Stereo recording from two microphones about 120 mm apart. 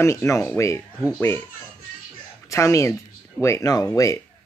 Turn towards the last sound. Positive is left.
turn(degrees=25)  # may be behind; listen again after turning